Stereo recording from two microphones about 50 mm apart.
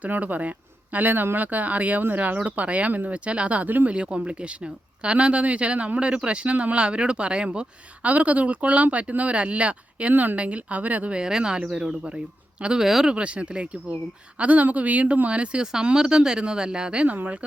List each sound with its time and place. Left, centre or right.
0.0 s speech: right
3.8 s speech: right
8.1 s speech: right
11.2 s speech: centre
12.8 s speech: centre
13.1 s speech: right
15.6 s speech: centre
17.1 s speech: right